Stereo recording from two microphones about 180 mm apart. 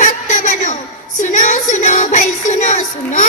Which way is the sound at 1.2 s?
45° left (ahead or behind).